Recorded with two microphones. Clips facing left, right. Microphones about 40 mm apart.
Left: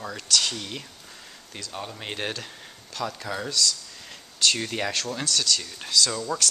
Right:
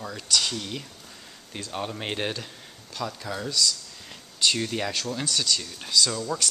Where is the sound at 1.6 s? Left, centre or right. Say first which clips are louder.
Right 4 dB; right.